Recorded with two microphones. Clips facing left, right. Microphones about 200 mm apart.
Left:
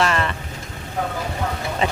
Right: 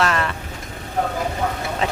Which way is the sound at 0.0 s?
Centre (ahead or behind).